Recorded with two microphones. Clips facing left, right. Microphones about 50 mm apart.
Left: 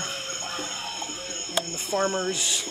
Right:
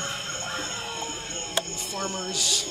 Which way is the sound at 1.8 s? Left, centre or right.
Left.